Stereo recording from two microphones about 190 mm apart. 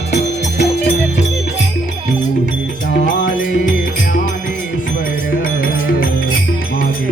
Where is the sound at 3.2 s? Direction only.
80° left.